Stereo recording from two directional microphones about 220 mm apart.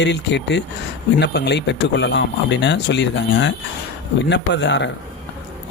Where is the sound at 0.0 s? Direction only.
50° left (ahead or behind).